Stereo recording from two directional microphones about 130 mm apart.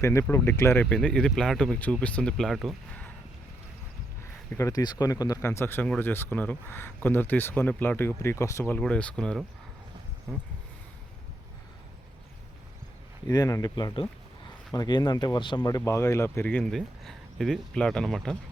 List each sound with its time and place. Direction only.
0.0 s speech: 20° left (ahead or behind); by 2.7 s centre (ahead or behind)
4.2 s speech: 20° left (ahead or behind)
8.6 s speech: 10° left (ahead or behind)
13.2 s speech: 25° left (ahead or behind)
15.8 s speech: 20° left (ahead or behind)
16.5 s speech: 5° left (ahead or behind)